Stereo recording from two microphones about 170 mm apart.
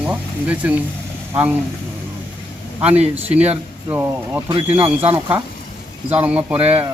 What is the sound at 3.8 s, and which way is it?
Speech, 15° right (ahead or behind).